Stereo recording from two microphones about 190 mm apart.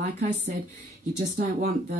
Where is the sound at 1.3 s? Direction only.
45° right (ahead or behind).